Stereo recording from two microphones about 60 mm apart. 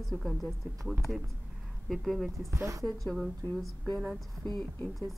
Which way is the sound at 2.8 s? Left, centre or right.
Centre.